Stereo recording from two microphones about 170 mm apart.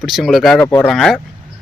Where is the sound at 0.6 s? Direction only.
15° left (ahead or behind).